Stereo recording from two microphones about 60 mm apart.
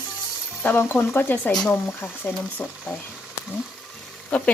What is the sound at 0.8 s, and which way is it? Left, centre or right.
Speech, left.